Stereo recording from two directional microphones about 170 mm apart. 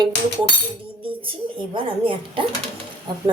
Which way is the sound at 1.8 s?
30° right (ahead or behind).